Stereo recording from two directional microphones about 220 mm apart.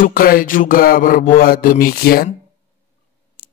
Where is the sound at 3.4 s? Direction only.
45° left (ahead or behind).